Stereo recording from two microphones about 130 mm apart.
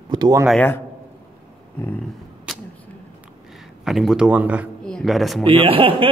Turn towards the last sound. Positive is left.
turn(degrees=-45)  # may be behind; listen again after turning